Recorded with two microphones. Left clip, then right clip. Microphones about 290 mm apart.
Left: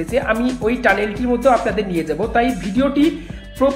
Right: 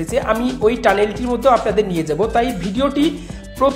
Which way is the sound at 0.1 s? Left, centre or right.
Right.